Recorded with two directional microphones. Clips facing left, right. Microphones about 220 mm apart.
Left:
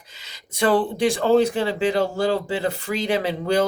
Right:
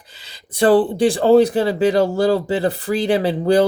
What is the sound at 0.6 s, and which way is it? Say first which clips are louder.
Speech: right 5 dB; 35° right (ahead or behind).